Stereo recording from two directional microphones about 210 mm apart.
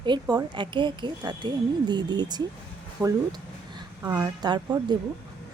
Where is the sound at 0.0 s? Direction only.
20° right (ahead or behind).